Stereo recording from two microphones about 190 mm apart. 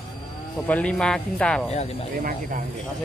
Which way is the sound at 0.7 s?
5° left (ahead or behind).